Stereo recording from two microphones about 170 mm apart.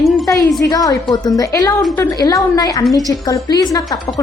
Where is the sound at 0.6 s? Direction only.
20° left (ahead or behind).